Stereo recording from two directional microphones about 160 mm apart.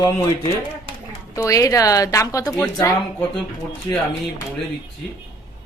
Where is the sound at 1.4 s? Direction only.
20° left (ahead or behind).